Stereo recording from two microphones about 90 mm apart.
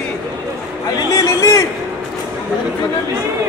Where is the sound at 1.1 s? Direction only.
40° left (ahead or behind).